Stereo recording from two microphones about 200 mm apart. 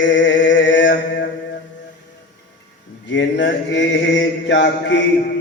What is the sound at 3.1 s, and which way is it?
Mantra, 65° left (ahead or behind).